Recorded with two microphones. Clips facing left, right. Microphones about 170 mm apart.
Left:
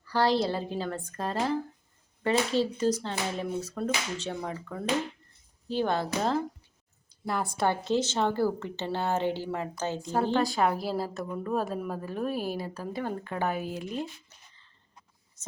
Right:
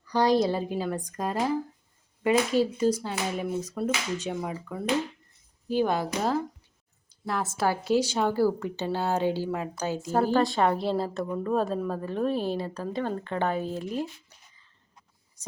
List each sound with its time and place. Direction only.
0.0 s a woman's voice: 15° right (ahead or behind); by 13.7 s 10° left (ahead or behind)
13.7 s speech: 5° right (ahead or behind)